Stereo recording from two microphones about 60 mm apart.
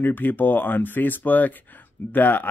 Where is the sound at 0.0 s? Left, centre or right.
Left.